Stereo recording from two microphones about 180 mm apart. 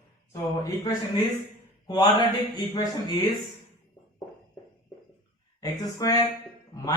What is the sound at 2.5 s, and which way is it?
Speech, 20° left (ahead or behind).